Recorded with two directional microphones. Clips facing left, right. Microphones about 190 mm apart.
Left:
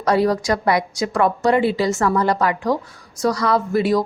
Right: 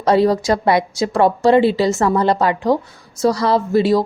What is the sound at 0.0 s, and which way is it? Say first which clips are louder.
A woman's voice: right 3 dB; 25° right (ahead or behind).